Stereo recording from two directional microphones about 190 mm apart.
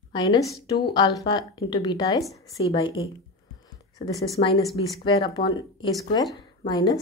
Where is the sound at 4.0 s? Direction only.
25° left (ahead or behind).